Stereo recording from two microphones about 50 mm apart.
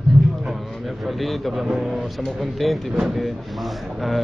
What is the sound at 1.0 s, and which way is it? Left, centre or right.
A man's voice, centre.